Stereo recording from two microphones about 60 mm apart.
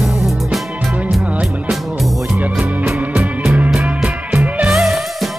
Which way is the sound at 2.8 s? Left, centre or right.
Right.